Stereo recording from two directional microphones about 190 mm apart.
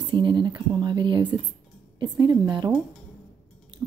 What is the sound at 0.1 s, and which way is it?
A woman's voice, 25° right (ahead or behind).